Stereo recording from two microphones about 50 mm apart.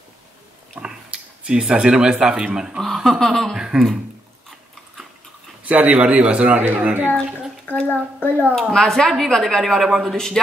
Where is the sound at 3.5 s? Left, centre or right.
Centre.